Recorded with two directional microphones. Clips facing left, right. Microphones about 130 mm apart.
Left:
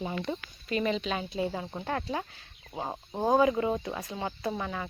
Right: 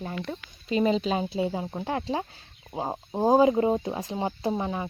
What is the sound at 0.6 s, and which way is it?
Speech, 25° right (ahead or behind).